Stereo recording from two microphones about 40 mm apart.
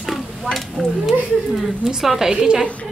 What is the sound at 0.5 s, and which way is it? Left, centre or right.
A woman's voice, centre.